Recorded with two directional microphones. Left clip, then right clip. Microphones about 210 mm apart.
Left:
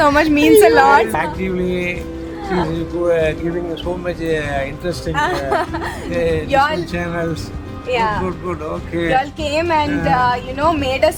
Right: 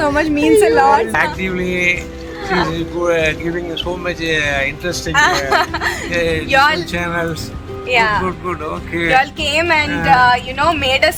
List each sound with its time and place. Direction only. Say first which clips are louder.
0.0 s a woman's voice: left 2 dB; 20° left (ahead or behind)
1.1 s speech: right 3 dB; 5° left (ahead or behind); by 5.9 s 20° left (ahead or behind)
6.1 s speech: left 1 dB; 10° left (ahead or behind)
6.5 s a woman's voice: right 4 dB; 25° left (ahead or behind)
6.9 s speech: right 3 dB; 5° left (ahead or behind)
7.9 s a woman's voice: right 4 dB; 25° left (ahead or behind)